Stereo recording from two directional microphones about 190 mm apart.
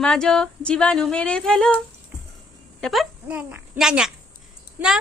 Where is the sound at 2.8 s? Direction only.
Centre (ahead or behind).